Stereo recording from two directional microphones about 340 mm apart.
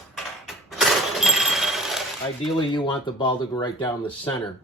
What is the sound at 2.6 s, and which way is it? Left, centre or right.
Speech, centre.